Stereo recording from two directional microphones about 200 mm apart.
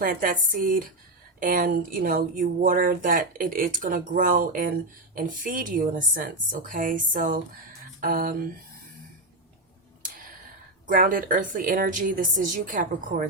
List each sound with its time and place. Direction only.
0.0 s speech: 45° right (ahead or behind)
10.8 s speech: 45° right (ahead or behind)